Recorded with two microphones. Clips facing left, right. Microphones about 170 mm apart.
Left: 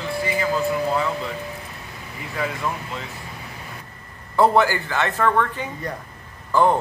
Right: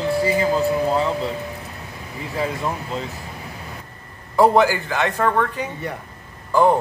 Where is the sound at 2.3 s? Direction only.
25° right (ahead or behind).